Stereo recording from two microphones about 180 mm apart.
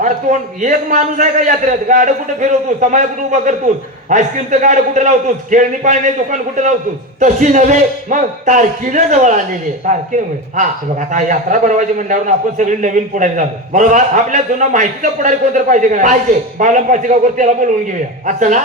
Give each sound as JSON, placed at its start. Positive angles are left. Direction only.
{"t": 0.0, "sound": "a man's voice", "side_deg": -45}